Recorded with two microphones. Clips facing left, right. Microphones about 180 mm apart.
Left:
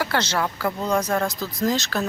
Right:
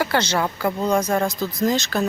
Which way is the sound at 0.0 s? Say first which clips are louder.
Right 3 dB; centre (ahead or behind).